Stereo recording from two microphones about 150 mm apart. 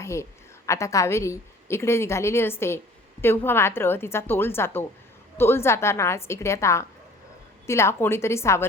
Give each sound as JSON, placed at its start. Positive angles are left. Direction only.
{"t": 0.0, "sound": "a woman's voice", "side_deg": 20}